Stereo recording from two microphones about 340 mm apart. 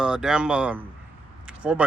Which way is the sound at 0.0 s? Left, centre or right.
Centre.